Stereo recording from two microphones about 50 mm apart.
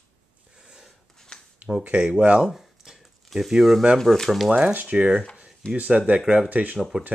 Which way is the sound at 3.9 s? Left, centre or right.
Centre.